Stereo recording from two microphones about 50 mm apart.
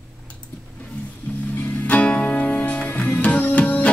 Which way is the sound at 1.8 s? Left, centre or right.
Left.